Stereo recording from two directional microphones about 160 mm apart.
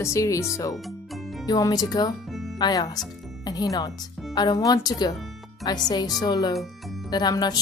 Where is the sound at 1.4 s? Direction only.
25° left (ahead or behind).